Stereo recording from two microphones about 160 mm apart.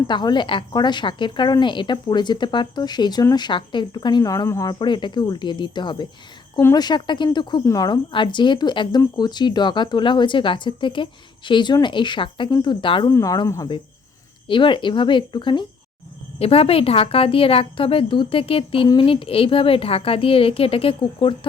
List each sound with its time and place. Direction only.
0.1 s speech: 30° left (ahead or behind)
6.6 s speech: 15° left (ahead or behind)
6.8 s a woman's voice: 30° left (ahead or behind)
13.1 s a woman's voice: 20° left (ahead or behind)